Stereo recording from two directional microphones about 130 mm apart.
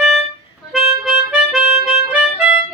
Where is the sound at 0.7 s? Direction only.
5° right (ahead or behind).